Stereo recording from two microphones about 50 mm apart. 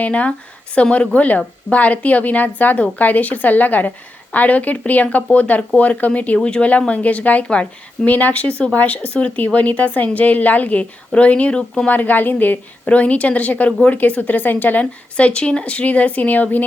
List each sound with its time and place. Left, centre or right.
0.0 s a woman's voice: left
11.9 s a woman's voice: left
15.1 s speech: left